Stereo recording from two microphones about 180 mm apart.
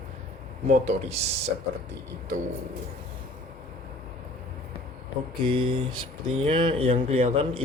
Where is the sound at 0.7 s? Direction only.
35° right (ahead or behind).